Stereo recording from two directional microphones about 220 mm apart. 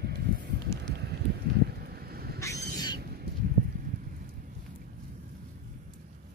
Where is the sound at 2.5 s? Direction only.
45° right (ahead or behind).